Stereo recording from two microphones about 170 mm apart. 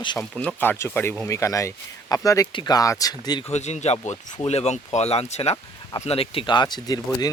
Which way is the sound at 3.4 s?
40° left (ahead or behind).